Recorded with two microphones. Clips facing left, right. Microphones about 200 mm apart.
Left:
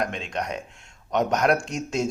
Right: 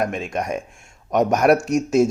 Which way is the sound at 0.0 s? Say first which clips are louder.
Right 5 dB; 5° right (ahead or behind).